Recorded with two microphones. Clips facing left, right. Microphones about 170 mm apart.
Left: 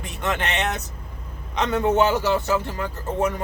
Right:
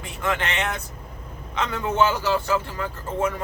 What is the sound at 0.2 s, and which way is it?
Speech, 20° left (ahead or behind).